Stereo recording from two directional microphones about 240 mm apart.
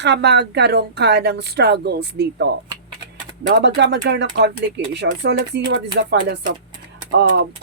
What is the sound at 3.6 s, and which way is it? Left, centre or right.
Speech, right.